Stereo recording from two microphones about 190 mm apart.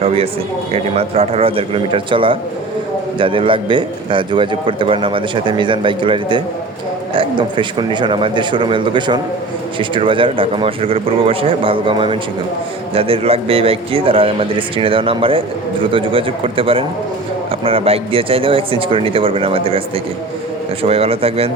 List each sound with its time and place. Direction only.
0.0 s a man's voice: 30° right (ahead or behind)
20.8 s speech: 30° right (ahead or behind)